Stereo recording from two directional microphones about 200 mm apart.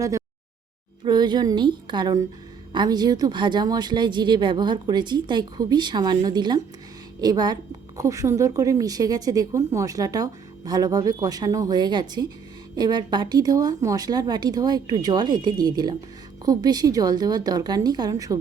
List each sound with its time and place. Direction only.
1.0 s a woman's voice: 20° right (ahead or behind)